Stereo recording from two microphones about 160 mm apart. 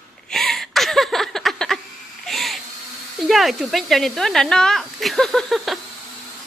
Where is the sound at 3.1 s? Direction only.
Centre (ahead or behind).